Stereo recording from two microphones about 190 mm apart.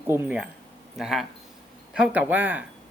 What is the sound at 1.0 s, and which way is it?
Speech, centre (ahead or behind).